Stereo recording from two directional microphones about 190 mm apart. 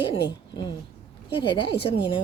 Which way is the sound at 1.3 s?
25° left (ahead or behind).